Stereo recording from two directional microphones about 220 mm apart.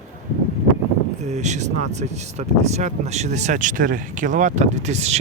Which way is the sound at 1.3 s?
30° right (ahead or behind).